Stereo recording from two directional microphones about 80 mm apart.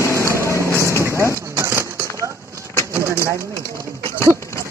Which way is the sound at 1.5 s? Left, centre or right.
Right.